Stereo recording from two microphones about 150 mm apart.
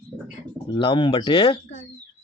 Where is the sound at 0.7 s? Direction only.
30° left (ahead or behind).